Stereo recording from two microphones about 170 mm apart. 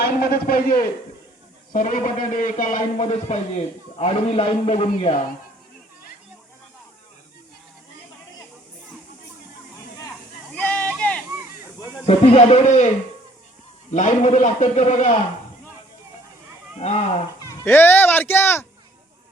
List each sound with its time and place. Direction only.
0.0 s a man's voice: 65° left (ahead or behind); by 5.1 s 35° left (ahead or behind)
10.5 s a sound: 10° left (ahead or behind)
12.0 s a man's voice: 40° left (ahead or behind)
13.9 s a man's voice: 45° left (ahead or behind)
17.6 s speech: 15° left (ahead or behind)